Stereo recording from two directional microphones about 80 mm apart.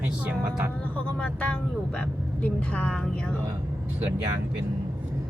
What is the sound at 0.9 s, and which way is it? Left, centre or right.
Speech, centre.